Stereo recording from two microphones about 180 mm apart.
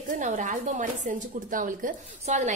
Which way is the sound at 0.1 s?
45° right (ahead or behind).